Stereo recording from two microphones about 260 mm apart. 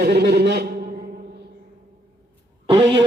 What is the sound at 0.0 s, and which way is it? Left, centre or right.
Speech, right.